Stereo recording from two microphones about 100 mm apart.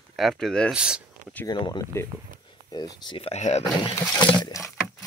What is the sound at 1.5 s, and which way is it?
Speech, 45° left (ahead or behind).